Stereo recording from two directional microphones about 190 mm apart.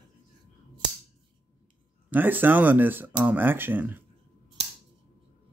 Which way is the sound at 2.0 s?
10° right (ahead or behind).